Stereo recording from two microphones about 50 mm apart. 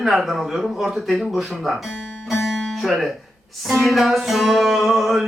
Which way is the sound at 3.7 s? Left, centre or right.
Centre.